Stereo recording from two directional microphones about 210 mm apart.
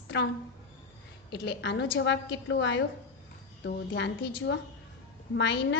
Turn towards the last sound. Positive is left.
turn(degrees=60)  # may be behind; listen again after turning